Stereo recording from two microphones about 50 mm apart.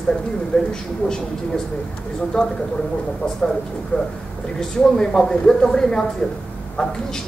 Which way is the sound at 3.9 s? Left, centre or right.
Left.